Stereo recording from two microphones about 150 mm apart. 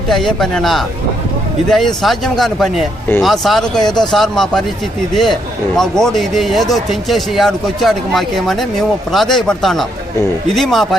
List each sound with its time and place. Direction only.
0.1 s speech: centre (ahead or behind)